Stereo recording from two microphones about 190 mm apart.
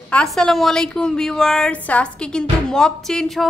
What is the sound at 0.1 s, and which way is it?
A woman's voice, 5° left (ahead or behind).